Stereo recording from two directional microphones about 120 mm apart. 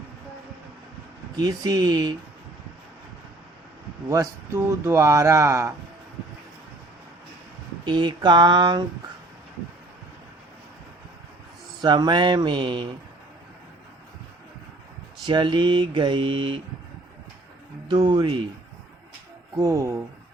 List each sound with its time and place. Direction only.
1.4 s mantra: 30° right (ahead or behind)
4.1 s speech: 25° right (ahead or behind)
7.9 s mantra: 40° right (ahead or behind)
11.8 s mantra: 35° right (ahead or behind)
15.3 s mantra: 40° right (ahead or behind)
17.8 s mantra: 40° right (ahead or behind)
19.5 s speech: 25° right (ahead or behind)